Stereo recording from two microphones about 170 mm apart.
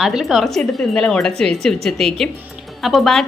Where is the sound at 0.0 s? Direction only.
5° right (ahead or behind).